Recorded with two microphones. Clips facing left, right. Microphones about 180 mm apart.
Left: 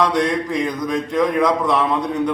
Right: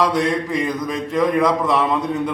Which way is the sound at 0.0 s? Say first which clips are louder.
Even; centre (ahead or behind).